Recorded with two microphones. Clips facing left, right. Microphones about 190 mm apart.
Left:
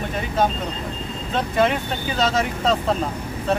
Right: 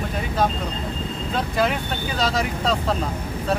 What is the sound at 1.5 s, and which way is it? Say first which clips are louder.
Speech: left 4 dB; centre (ahead or behind).